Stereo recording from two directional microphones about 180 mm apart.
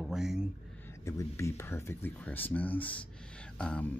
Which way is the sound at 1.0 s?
15° left (ahead or behind).